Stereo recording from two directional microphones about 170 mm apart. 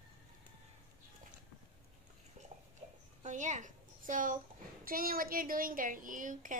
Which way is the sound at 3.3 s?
45° right (ahead or behind).